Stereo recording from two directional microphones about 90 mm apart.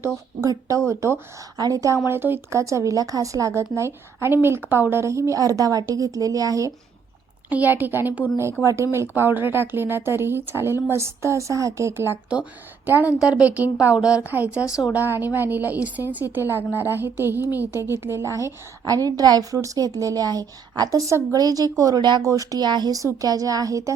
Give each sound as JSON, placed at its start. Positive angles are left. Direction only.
{"t": 0.9, "sound": "speech", "side_deg": -35}
{"t": 1.5, "sound": "speech", "side_deg": -45}
{"t": 2.0, "sound": "speech", "side_deg": -25}
{"t": 7.5, "sound": "speech", "side_deg": -20}
{"t": 8.6, "sound": "speech", "side_deg": -30}
{"t": 12.3, "sound": "a woman's voice", "side_deg": -15}
{"t": 22.2, "sound": "speech", "side_deg": -40}